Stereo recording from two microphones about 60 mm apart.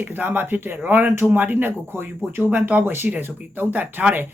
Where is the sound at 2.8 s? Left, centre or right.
Right.